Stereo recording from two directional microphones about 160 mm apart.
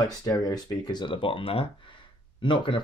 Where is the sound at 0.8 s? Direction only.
30° left (ahead or behind).